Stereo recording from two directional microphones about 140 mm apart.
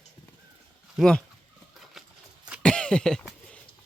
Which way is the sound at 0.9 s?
5° left (ahead or behind).